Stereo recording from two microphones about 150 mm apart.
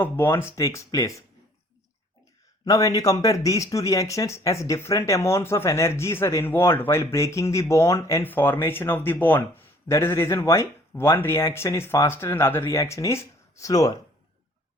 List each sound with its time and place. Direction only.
0.0 s speech: 15° left (ahead or behind)
2.6 s speech: 25° left (ahead or behind)